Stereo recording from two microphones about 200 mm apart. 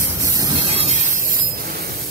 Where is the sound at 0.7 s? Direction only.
30° right (ahead or behind).